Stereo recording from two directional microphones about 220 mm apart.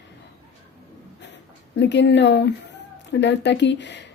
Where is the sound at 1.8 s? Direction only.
55° left (ahead or behind).